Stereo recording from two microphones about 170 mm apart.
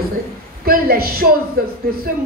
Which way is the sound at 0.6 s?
60° right (ahead or behind).